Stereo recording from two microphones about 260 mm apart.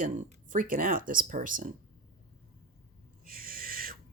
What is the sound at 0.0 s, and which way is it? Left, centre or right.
Speech, right.